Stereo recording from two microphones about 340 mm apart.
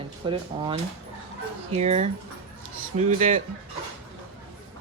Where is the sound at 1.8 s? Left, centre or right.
Centre.